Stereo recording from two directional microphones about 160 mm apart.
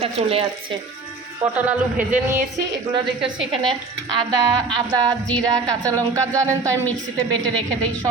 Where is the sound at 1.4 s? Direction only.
10° right (ahead or behind).